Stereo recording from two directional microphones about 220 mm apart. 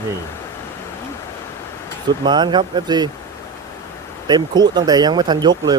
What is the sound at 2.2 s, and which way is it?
Speech, 20° right (ahead or behind).